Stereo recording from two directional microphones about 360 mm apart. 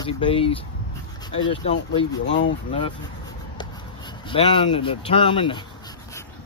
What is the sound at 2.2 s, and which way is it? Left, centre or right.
Speech, left.